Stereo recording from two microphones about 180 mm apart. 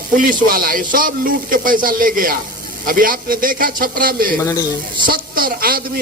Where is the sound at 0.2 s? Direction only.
50° right (ahead or behind).